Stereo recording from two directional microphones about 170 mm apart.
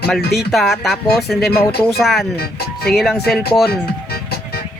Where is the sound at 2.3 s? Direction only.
65° left (ahead or behind).